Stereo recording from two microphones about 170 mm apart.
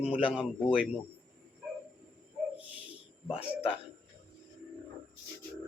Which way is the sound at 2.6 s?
10° right (ahead or behind).